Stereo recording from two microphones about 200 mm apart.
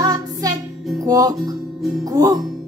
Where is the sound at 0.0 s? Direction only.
20° right (ahead or behind).